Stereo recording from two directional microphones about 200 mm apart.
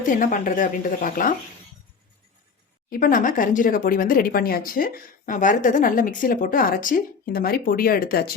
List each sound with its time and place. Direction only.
0.0 s speech: 40° left (ahead or behind)
2.9 s speech: 45° left (ahead or behind)